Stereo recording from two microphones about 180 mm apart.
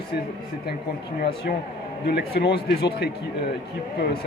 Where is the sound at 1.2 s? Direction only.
60° left (ahead or behind).